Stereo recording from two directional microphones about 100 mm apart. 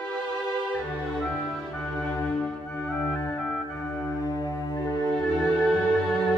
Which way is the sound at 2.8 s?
20° left (ahead or behind).